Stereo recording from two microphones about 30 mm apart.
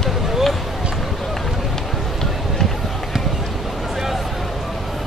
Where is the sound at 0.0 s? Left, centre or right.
Centre.